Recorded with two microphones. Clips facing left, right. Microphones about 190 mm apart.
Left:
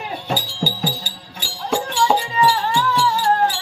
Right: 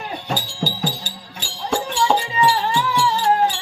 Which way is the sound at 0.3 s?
10° left (ahead or behind).